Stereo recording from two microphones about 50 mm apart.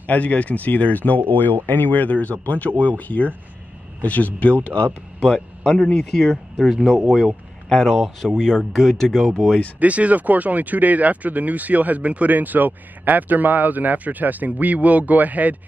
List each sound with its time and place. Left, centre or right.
0.0 s speech: left
5.2 s speech: centre
6.9 s speech: centre
8.4 s speech: centre
9.8 s speech: right